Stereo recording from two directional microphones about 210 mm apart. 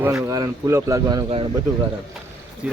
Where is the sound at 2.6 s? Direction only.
5° right (ahead or behind).